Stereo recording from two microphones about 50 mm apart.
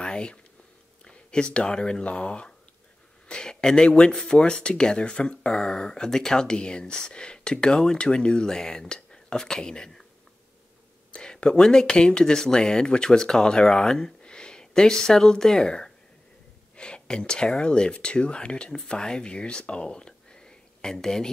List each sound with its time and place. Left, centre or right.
0.0 s whispering: centre
1.0 s speech: centre
11.1 s speech: centre